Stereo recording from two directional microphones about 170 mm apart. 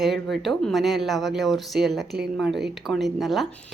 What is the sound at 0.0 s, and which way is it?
A woman's voice, centre (ahead or behind).